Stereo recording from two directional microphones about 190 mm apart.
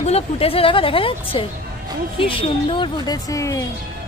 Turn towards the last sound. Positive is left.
turn(degrees=15)  # may be behind; listen again after turning